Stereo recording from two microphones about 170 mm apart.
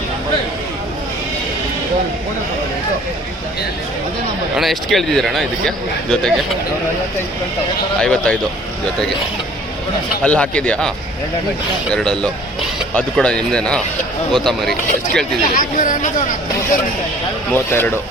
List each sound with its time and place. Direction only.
4.5 s speech: centre (ahead or behind)
8.0 s speech: 5° left (ahead or behind)
10.2 s speech: 5° left (ahead or behind)
11.9 s speech: 5° left (ahead or behind)
15.5 s speech: 50° left (ahead or behind)
17.5 s speech: 15° left (ahead or behind)